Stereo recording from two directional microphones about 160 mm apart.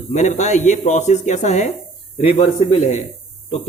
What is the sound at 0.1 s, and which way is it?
Speech, 45° left (ahead or behind).